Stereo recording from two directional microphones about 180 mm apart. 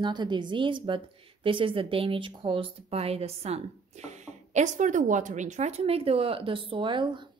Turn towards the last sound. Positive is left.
turn(degrees=-25)  # may be behind; listen again after turning